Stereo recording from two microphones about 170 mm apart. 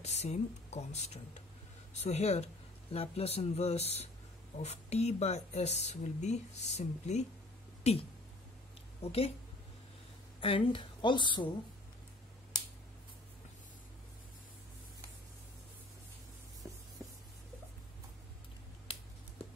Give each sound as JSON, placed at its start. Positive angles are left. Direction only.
{"t": 0.0, "sound": "speech", "side_deg": 40}
{"t": 9.0, "sound": "speech", "side_deg": 35}
{"t": 10.4, "sound": "speech", "side_deg": 30}